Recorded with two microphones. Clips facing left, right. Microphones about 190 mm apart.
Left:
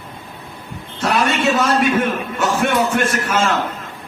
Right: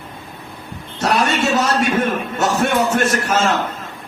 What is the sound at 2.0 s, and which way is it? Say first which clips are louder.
A man's voice: right 1 dB; 40° right (ahead or behind).